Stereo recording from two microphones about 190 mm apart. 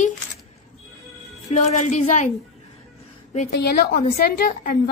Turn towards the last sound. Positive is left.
turn(degrees=50)  # may be behind; listen again after turning